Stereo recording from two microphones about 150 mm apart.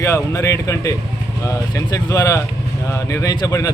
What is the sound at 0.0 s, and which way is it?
Speech, 20° left (ahead or behind).